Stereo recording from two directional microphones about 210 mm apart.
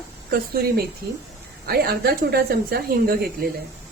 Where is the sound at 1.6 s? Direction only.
45° right (ahead or behind).